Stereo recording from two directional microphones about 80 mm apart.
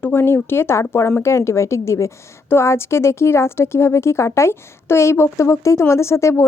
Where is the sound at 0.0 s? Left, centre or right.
Left.